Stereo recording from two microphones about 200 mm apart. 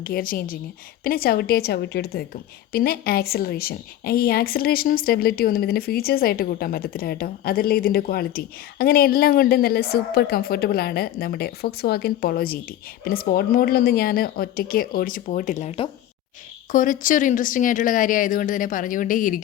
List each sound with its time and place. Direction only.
0.0 s a woman's voice: 45° left (ahead or behind)
16.7 s a woman's voice: 40° left (ahead or behind)